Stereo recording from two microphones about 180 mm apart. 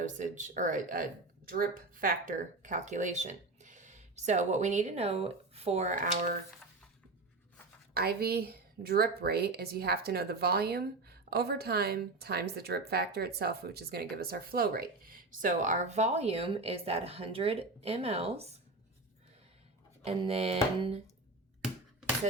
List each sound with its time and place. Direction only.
0.0 s speech: 45° right (ahead or behind)
7.9 s a woman's voice: 60° right (ahead or behind); by 18.6 s 35° right (ahead or behind)
20.1 s speech: 30° right (ahead or behind)